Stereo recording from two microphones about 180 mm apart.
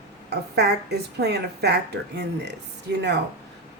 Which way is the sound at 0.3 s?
65° right (ahead or behind).